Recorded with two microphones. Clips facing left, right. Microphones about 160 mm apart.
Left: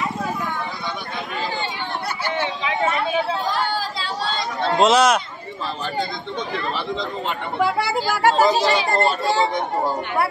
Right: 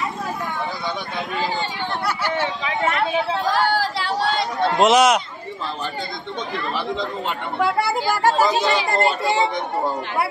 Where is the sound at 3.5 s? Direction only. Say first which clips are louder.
Right 4 dB; 70° right (ahead or behind).